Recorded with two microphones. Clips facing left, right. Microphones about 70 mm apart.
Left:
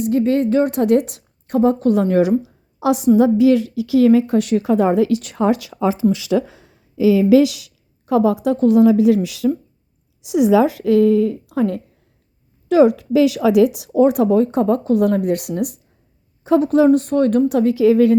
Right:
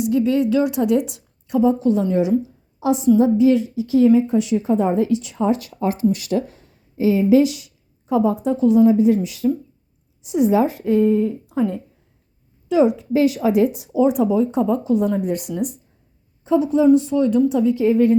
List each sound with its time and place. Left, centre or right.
0.0 s a woman's voice: left
8.5 s a woman's voice: left
13.9 s a woman's voice: left